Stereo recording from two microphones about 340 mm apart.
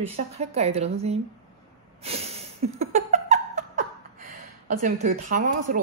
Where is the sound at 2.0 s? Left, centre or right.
Centre.